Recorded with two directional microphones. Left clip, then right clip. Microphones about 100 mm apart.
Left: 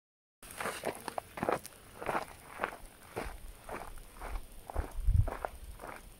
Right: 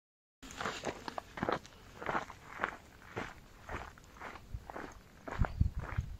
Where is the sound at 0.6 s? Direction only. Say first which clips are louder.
Left 2 dB; centre (ahead or behind).